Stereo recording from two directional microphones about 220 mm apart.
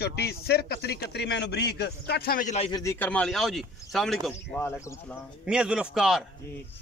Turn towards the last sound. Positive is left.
turn(degrees=0)  # may be behind; listen again after turning